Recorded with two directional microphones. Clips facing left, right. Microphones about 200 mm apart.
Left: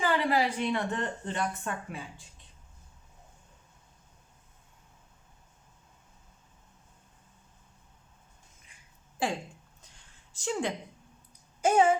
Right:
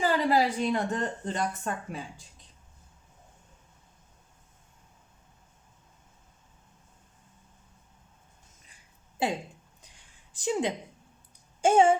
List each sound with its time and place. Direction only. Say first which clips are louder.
0.0 s a woman's voice: right 2 dB; 40° right (ahead or behind)
9.1 s speech: right 2 dB; 20° right (ahead or behind)
9.9 s a sound: even; 15° right (ahead or behind)